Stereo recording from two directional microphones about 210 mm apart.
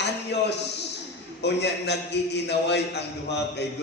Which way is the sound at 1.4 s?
55° left (ahead or behind).